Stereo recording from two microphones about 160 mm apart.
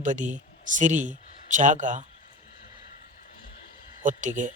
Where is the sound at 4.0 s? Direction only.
50° right (ahead or behind).